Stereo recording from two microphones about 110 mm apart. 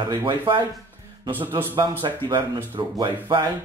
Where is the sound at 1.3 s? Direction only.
15° right (ahead or behind).